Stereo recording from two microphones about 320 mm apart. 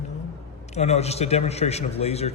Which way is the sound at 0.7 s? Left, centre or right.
Centre.